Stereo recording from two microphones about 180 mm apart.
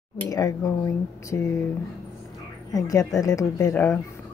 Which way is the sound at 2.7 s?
20° left (ahead or behind).